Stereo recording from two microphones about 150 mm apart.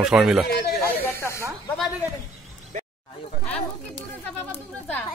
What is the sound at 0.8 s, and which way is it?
Snake, 15° left (ahead or behind).